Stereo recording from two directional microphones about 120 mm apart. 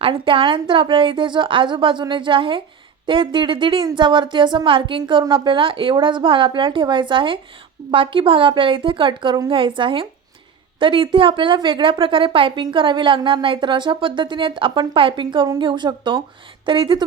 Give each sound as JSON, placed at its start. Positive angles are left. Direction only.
{"t": 0.0, "sound": "a woman's voice", "side_deg": -45}